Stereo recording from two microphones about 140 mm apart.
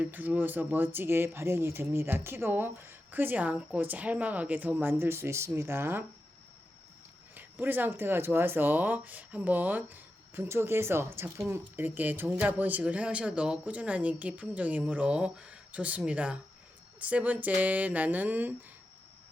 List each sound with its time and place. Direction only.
0.0 s speech: 10° right (ahead or behind)
7.3 s speech: 15° right (ahead or behind)